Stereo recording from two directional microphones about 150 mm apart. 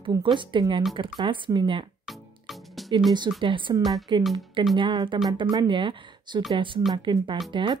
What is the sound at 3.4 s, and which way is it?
A woman's voice, 35° right (ahead or behind).